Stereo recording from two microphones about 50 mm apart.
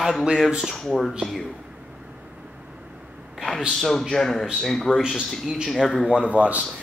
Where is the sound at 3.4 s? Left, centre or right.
Centre.